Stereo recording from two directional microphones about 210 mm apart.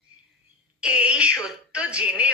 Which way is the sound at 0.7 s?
5° right (ahead or behind).